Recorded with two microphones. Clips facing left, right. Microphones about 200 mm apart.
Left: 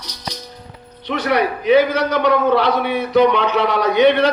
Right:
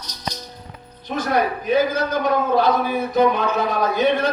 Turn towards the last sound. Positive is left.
turn(degrees=75)  # may be behind; listen again after turning